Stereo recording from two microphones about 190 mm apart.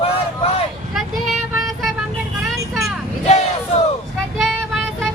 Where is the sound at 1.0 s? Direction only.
Centre (ahead or behind).